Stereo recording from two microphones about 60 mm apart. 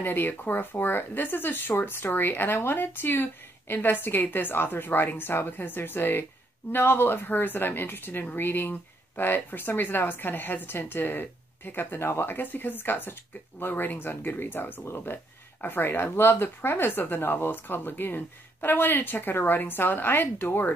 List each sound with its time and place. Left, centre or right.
0.0 s a woman's voice: left